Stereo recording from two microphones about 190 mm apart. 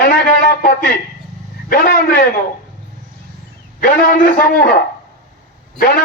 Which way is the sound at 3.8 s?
45° left (ahead or behind).